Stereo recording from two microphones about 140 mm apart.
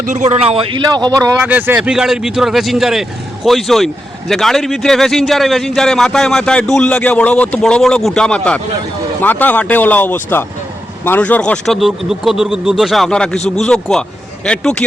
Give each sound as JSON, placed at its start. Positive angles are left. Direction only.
{"t": 0.1, "sound": "speech", "side_deg": -50}
{"t": 0.9, "sound": "speech", "side_deg": -30}
{"t": 1.4, "sound": "a man's voice", "side_deg": -10}